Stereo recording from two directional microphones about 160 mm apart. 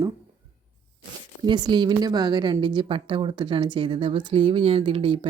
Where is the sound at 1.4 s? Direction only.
25° right (ahead or behind).